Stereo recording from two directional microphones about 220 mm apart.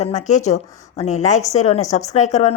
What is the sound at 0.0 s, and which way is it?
A woman's voice, 30° left (ahead or behind).